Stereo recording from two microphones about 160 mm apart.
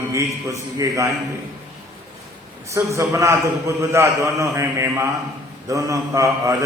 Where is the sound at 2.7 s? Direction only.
20° right (ahead or behind).